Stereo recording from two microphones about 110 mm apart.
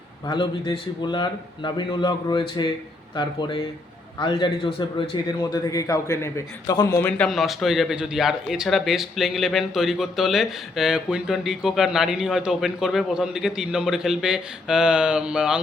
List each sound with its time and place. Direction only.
0.3 s a man's voice: 45° left (ahead or behind)
5.4 s a man's voice: 35° left (ahead or behind)
7.3 s speech: centre (ahead or behind)